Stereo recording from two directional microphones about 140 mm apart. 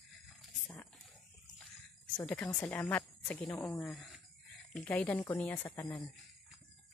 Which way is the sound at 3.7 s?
Centre (ahead or behind).